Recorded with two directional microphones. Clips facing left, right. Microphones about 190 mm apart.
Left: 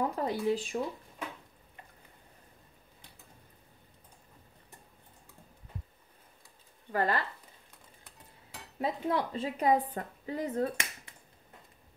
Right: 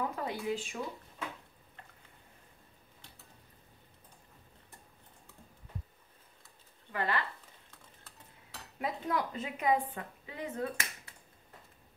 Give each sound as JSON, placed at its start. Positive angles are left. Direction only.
{"t": 0.0, "sound": "speech", "side_deg": 40}
{"t": 6.9, "sound": "speech", "side_deg": 40}
{"t": 8.7, "sound": "a woman's voice", "side_deg": 30}